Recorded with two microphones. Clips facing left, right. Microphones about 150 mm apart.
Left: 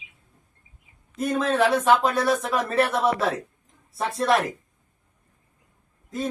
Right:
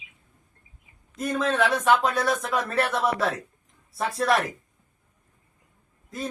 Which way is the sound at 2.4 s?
5° left (ahead or behind).